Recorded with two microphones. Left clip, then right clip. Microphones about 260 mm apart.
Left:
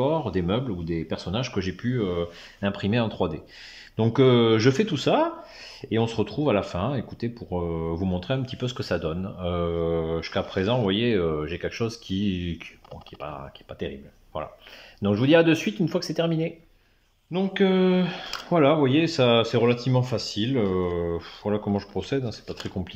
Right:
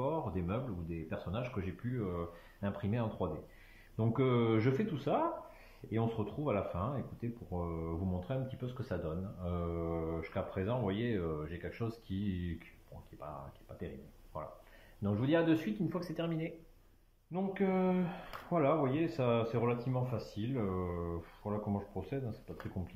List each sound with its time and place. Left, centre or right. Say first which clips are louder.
0.0 s speech: left 12 dB; left
13.7 s speech: left 13 dB; left